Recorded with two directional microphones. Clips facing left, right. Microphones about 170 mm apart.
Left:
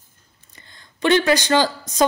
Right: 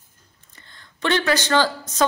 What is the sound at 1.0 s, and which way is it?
A man's voice, 15° left (ahead or behind).